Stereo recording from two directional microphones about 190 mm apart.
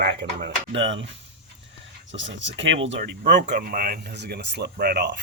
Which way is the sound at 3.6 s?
50° right (ahead or behind).